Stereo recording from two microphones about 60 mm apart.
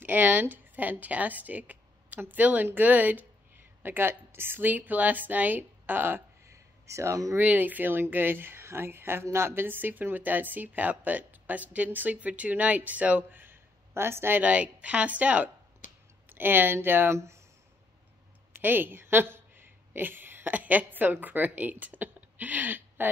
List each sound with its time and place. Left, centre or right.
0.0 s speech: right
3.8 s speech: right
6.5 s a sound: right
7.3 s speech: right
14.4 s speech: right
16.3 s speech: right
18.6 s a woman's voice: right